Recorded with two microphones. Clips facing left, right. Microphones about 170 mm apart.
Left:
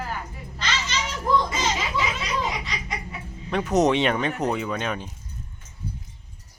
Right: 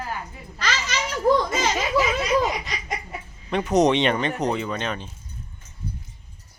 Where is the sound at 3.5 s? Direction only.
Centre (ahead or behind).